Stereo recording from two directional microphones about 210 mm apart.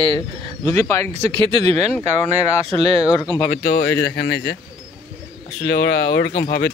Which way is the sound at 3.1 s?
20° left (ahead or behind).